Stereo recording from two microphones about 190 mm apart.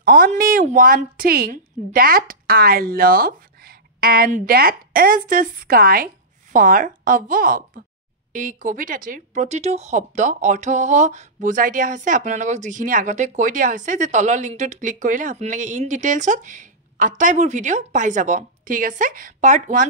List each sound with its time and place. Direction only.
0.0 s a woman's voice: 45° right (ahead or behind)